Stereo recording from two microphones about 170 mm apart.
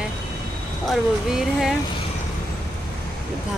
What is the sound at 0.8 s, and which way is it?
Speech, centre (ahead or behind).